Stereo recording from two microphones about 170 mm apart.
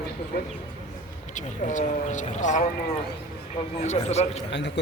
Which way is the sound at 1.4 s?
45° left (ahead or behind).